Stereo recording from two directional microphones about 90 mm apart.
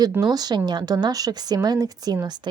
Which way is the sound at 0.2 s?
50° right (ahead or behind).